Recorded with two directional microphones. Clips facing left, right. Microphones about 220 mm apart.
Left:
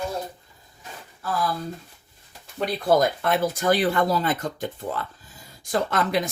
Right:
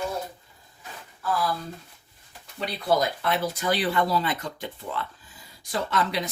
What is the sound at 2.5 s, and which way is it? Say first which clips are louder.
Speech: left 4 dB; 50° left (ahead or behind).